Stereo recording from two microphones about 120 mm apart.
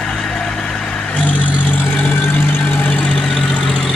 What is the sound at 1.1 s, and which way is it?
Vehicle, 10° left (ahead or behind).